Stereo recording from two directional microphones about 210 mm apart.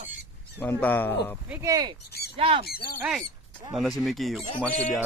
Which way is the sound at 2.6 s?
45° left (ahead or behind).